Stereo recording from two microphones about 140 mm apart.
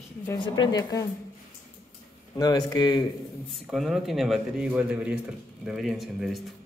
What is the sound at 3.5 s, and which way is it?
A man's voice, centre (ahead or behind).